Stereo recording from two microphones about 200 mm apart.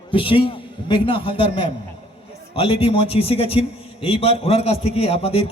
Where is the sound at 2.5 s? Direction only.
30° left (ahead or behind).